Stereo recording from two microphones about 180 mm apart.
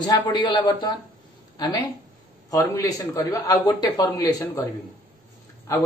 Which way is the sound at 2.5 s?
20° left (ahead or behind).